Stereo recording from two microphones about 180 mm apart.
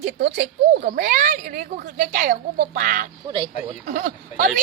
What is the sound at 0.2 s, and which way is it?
A woman's voice, 60° right (ahead or behind).